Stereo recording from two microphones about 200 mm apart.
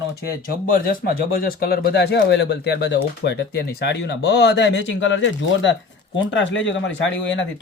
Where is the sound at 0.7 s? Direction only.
45° left (ahead or behind).